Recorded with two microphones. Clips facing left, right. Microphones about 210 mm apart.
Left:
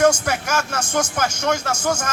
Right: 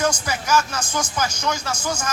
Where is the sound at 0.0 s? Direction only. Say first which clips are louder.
Left 6 dB; 60° left (ahead or behind).